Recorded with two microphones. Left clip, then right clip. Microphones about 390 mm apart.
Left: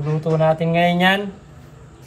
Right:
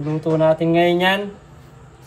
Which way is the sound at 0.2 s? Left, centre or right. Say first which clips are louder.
Right 2 dB; centre.